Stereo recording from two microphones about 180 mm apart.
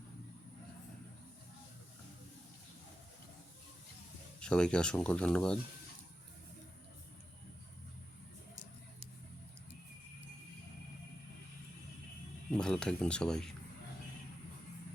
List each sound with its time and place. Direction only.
4.4 s speech: 5° left (ahead or behind)
12.5 s speech: 5° left (ahead or behind)